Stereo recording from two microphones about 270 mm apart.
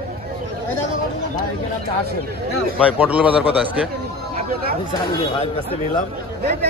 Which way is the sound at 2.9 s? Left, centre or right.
Centre.